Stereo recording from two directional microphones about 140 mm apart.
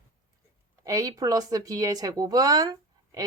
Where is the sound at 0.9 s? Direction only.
25° right (ahead or behind).